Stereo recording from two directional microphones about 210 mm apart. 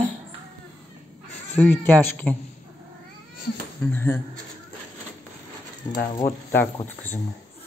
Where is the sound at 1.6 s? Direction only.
10° left (ahead or behind).